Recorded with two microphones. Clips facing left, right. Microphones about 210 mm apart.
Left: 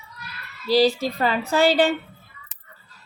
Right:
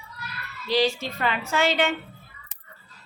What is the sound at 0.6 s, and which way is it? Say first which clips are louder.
Speech: left 5 dB; 35° left (ahead or behind).